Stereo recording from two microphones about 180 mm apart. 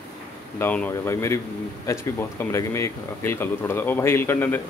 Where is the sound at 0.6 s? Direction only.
10° left (ahead or behind).